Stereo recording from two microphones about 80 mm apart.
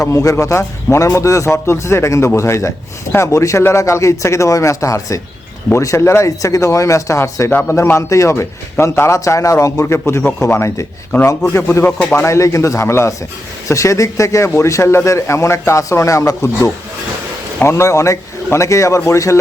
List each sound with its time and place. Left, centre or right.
0.0 s speech: left